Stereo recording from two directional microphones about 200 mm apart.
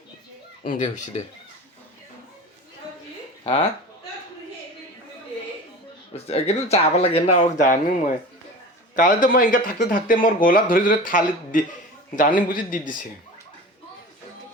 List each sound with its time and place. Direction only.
0.6 s speech: 45° left (ahead or behind)
3.4 s speech: 25° left (ahead or behind)
6.1 s speech: 30° left (ahead or behind)
9.0 s speech: 40° left (ahead or behind)